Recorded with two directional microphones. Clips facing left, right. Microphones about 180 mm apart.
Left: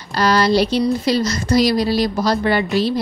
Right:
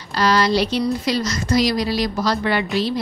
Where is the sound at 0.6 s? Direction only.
30° left (ahead or behind).